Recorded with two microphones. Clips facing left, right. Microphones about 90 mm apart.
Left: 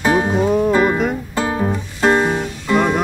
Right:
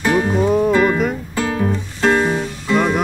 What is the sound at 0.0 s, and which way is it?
Music, 15° left (ahead or behind).